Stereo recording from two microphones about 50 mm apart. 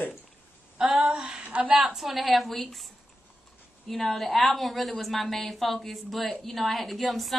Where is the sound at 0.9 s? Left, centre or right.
Centre.